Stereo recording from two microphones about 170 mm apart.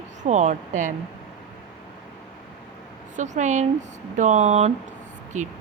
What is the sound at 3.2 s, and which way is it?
Speech, 45° right (ahead or behind).